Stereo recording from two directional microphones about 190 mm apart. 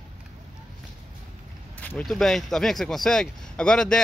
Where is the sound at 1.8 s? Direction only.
5° left (ahead or behind).